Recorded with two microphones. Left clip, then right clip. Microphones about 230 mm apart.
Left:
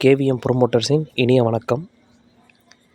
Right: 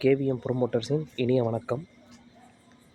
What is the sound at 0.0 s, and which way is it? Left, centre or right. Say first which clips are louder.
Speech: left 8 dB; left.